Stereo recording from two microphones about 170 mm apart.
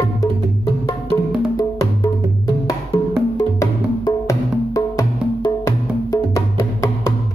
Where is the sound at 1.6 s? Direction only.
20° left (ahead or behind).